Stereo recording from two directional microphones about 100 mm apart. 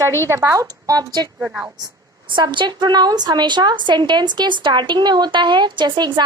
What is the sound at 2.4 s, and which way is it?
A woman's voice, 50° right (ahead or behind).